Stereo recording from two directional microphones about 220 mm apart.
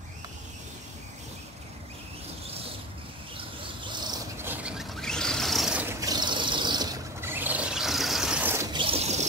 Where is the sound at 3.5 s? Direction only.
20° right (ahead or behind).